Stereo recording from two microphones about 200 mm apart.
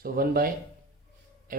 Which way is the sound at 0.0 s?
45° right (ahead or behind).